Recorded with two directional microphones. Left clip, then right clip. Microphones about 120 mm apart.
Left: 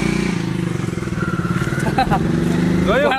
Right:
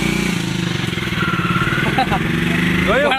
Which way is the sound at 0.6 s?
35° right (ahead or behind).